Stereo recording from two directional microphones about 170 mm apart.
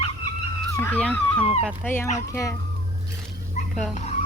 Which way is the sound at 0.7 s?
10° left (ahead or behind).